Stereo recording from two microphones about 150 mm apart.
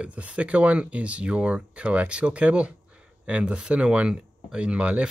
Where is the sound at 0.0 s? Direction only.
10° right (ahead or behind).